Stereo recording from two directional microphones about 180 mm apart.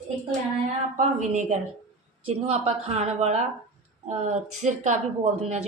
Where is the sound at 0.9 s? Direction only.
40° right (ahead or behind).